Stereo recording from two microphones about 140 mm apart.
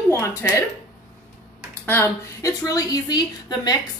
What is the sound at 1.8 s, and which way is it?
A woman's voice, 15° left (ahead or behind).